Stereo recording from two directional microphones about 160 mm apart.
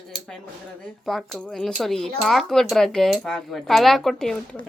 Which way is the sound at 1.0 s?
Centre (ahead or behind).